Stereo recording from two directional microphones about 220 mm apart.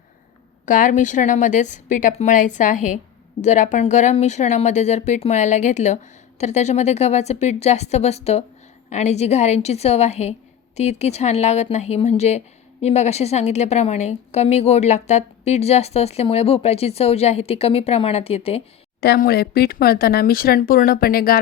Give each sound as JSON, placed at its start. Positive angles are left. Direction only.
{"t": 0.6, "sound": "a woman's voice", "side_deg": 35}
{"t": 18.9, "sound": "speech", "side_deg": 45}